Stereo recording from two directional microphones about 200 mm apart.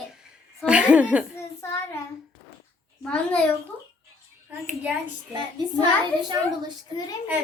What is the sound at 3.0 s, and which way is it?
Speech, 5° left (ahead or behind).